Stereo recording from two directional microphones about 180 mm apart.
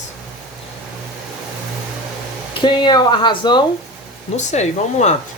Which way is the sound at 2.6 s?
25° left (ahead or behind).